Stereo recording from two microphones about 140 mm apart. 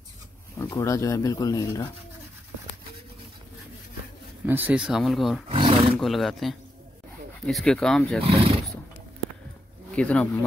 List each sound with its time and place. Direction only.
0.6 s speech: 20° left (ahead or behind)
4.5 s speech: 10° right (ahead or behind)
5.5 s roar: 40° right (ahead or behind)
5.9 s speech: centre (ahead or behind)
8.2 s speech: 45° right (ahead or behind)
9.9 s speech: 10° left (ahead or behind)